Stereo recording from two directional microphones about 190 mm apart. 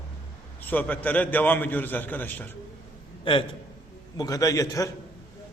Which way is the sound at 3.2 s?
30° left (ahead or behind).